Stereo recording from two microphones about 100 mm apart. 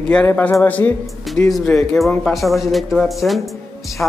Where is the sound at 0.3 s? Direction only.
20° left (ahead or behind).